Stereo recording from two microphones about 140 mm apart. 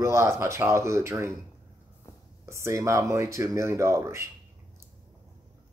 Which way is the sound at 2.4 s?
20° right (ahead or behind).